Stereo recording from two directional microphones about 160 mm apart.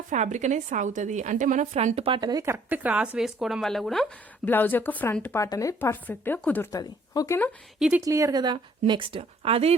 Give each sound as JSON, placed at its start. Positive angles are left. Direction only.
{"t": 0.1, "sound": "a woman's voice", "side_deg": -45}
{"t": 4.4, "sound": "a woman's voice", "side_deg": 10}
{"t": 7.8, "sound": "speech", "side_deg": -5}
{"t": 8.0, "sound": "a woman's voice", "side_deg": -20}